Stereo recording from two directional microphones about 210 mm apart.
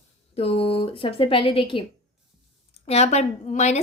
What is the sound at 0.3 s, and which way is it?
A woman's voice, 30° left (ahead or behind).